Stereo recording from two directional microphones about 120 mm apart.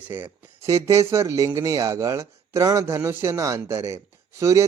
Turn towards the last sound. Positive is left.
turn(degrees=-25)  # may be behind; listen again after turning